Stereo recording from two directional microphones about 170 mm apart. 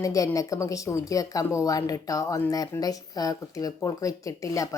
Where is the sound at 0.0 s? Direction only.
20° left (ahead or behind).